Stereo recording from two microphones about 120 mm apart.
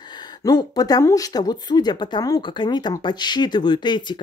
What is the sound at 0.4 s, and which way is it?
Speech, 35° left (ahead or behind).